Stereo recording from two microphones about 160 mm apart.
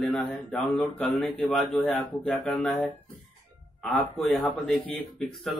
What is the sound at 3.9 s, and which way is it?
Speech, centre (ahead or behind).